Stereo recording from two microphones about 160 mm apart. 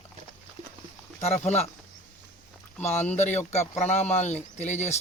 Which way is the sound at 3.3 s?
45° left (ahead or behind).